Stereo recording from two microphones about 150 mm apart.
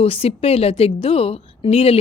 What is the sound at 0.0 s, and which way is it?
Speech, 40° left (ahead or behind).